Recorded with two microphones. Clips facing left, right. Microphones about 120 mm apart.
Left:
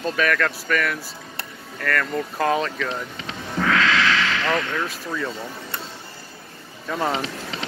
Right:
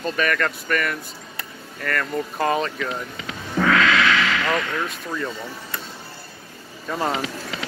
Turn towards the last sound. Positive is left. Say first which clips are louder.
# even
turn(degrees=30)  # may be behind; listen again after turning